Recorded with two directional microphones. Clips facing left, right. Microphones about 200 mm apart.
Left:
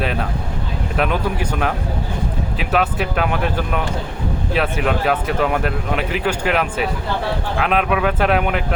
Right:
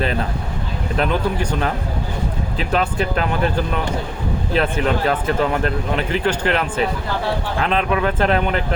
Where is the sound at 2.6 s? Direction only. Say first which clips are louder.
Even; 5° left (ahead or behind).